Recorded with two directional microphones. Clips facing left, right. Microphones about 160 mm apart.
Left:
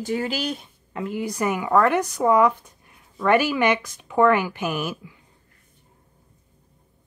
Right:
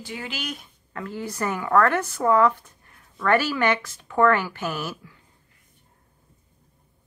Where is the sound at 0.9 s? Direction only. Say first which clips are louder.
Left 4 dB; 20° left (ahead or behind).